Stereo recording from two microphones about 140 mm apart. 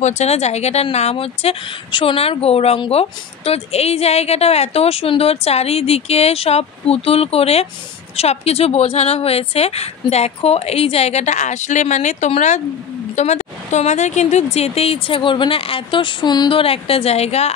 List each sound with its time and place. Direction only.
0.0 s a woman's voice: 50° left (ahead or behind)